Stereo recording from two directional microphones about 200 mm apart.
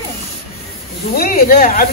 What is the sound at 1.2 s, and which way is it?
Speech, 45° left (ahead or behind).